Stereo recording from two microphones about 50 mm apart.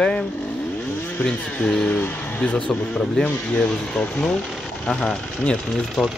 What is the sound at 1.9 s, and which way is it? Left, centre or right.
Speech, left.